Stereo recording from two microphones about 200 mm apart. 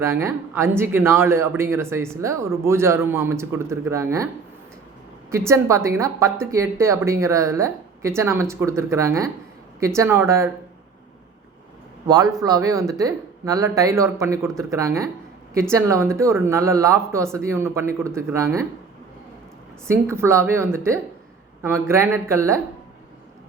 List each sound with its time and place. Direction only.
0.0 s speech: 15° right (ahead or behind)
5.3 s speech: 15° right (ahead or behind)
12.0 s a man's voice: 20° right (ahead or behind)
19.9 s speech: 15° right (ahead or behind)